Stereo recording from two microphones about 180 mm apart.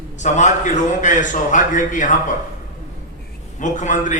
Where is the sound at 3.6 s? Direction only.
45° left (ahead or behind).